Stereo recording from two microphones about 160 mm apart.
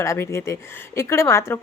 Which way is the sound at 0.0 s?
20° left (ahead or behind).